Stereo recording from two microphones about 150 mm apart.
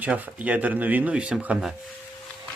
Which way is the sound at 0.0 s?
10° right (ahead or behind).